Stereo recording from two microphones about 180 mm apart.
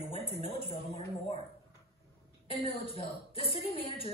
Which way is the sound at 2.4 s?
30° left (ahead or behind).